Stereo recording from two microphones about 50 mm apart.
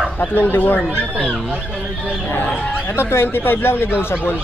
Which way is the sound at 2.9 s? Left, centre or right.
Left.